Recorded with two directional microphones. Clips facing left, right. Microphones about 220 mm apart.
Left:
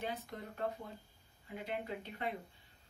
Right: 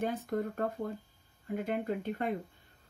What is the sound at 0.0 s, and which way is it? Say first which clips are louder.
Speech: right 10 dB; 50° right (ahead or behind).